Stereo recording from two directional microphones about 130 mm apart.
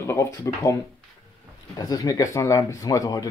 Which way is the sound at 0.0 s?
20° left (ahead or behind).